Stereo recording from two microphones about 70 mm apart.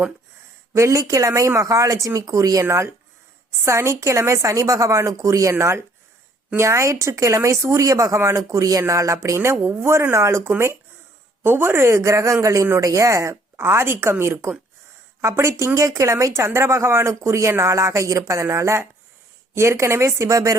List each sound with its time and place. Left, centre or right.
0.8 s speech: right
2.6 s a woman's voice: right